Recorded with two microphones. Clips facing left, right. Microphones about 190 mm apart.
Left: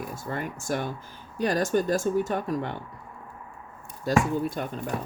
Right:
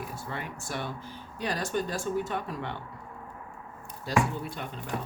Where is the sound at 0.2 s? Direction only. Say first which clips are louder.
Left 5 dB; 45° left (ahead or behind).